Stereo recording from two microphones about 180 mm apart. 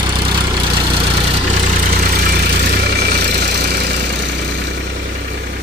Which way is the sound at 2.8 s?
60° right (ahead or behind).